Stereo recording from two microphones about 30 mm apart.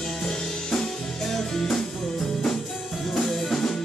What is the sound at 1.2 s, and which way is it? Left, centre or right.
Music, centre.